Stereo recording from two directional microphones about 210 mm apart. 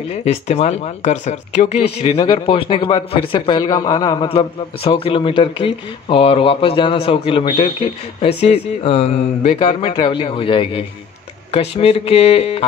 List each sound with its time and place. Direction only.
0.1 s speech: 30° left (ahead or behind)